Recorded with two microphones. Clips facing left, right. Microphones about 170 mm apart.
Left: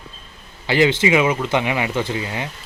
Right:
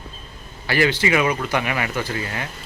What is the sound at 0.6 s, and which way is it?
Speech, 20° left (ahead or behind).